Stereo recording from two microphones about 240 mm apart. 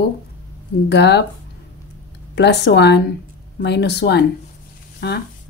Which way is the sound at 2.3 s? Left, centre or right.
Left.